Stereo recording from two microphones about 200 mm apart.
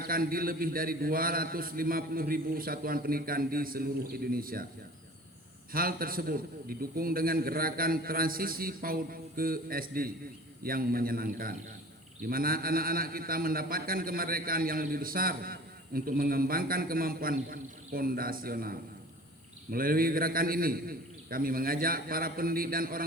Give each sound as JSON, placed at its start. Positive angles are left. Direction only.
{"t": 0.0, "sound": "a man's voice", "side_deg": -45}
{"t": 5.7, "sound": "a man's voice", "side_deg": -45}